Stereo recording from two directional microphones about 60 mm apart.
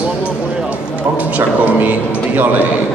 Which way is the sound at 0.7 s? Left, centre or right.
Right.